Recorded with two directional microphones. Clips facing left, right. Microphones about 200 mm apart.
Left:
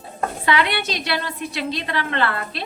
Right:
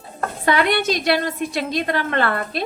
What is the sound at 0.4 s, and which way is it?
A woman's voice, 45° right (ahead or behind).